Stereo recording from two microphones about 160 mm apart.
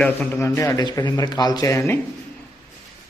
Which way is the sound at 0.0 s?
10° left (ahead or behind).